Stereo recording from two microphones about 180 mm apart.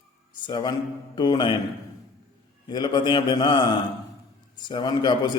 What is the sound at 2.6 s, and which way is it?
A man's voice, 25° left (ahead or behind).